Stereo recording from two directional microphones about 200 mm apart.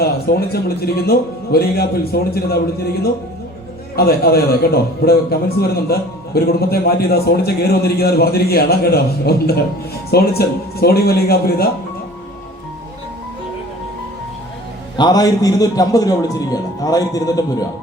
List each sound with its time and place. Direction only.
0.0 s a man's voice: 50° left (ahead or behind)
3.9 s a man's voice: 50° left (ahead or behind)
14.9 s a man's voice: 20° left (ahead or behind)